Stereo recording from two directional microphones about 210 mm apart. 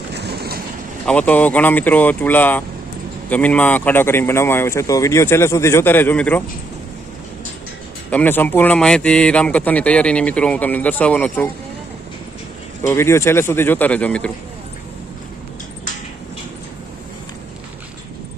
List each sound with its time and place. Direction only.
0.1 s train: 50° right (ahead or behind)
1.0 s speech: 5° left (ahead or behind)
8.1 s speech: 10° left (ahead or behind)
12.9 s speech: 10° left (ahead or behind)